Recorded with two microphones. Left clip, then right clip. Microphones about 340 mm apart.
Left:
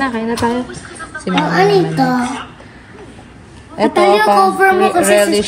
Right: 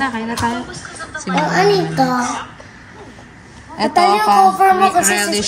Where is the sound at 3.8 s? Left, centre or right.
Centre.